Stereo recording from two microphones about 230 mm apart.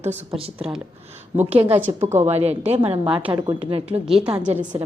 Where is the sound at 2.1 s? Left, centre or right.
Right.